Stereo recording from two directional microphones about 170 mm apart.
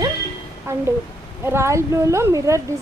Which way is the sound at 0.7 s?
15° right (ahead or behind).